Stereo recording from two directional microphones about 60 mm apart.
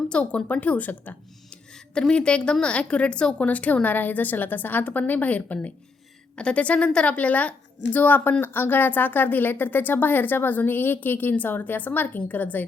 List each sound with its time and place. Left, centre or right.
0.1 s a woman's voice: centre
1.5 s a woman's voice: centre